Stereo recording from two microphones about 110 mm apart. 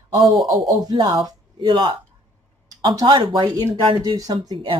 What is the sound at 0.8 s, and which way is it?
Speech, 40° right (ahead or behind).